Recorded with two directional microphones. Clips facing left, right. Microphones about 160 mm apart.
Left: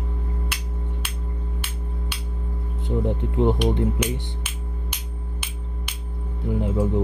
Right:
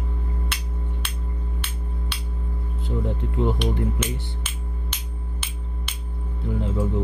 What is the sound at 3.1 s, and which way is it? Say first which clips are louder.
Speech: left 4 dB; 20° left (ahead or behind).